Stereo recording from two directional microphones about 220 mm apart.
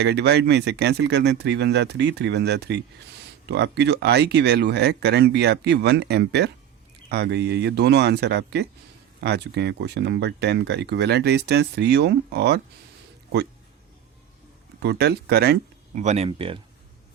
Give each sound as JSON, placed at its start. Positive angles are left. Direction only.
{"t": 0.0, "sound": "speech", "side_deg": -50}
{"t": 14.8, "sound": "speech", "side_deg": -50}
{"t": 16.0, "sound": "speech", "side_deg": -30}